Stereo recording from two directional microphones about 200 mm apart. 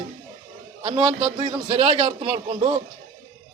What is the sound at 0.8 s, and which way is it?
A man's voice, 25° right (ahead or behind).